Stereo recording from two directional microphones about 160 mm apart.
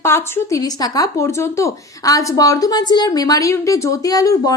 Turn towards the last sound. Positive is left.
turn(degrees=20)  # may be behind; listen again after turning